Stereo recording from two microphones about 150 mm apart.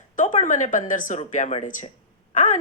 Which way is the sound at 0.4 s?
55° left (ahead or behind).